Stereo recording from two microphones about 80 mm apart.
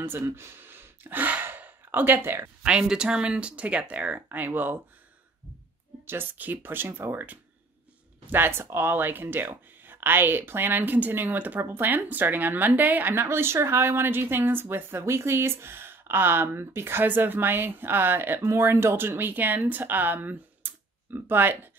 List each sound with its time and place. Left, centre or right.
0.0 s speech: right
2.6 s speech: centre
6.0 s speech: right